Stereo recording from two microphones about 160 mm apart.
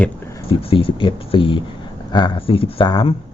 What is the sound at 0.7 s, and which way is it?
Speech, 30° left (ahead or behind).